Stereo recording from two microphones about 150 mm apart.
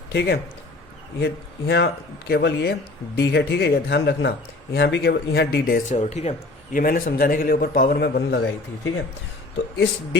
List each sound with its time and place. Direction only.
0.1 s speech: 90° left
5.9 s speech: 50° left (ahead or behind)
6.7 s a man's voice: 65° left (ahead or behind); by 8.4 s 90° left
9.7 s speech: 90° left